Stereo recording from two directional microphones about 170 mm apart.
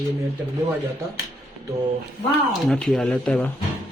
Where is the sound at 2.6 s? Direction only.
Centre (ahead or behind).